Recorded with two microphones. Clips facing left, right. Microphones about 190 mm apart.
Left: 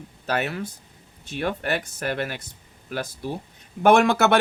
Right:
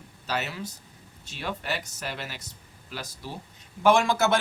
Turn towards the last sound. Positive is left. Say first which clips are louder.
# left 4 dB
turn(degrees=65)  # may be behind; listen again after turning